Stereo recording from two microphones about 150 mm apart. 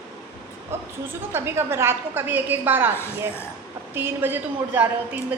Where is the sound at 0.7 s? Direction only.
15° right (ahead or behind).